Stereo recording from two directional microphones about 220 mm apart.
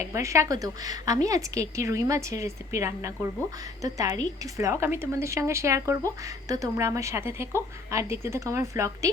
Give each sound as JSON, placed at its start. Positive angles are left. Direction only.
{"t": 0.0, "sound": "a woman's voice", "side_deg": -15}